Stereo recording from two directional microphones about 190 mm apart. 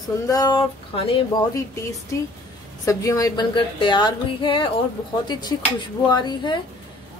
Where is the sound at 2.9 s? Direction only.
15° left (ahead or behind).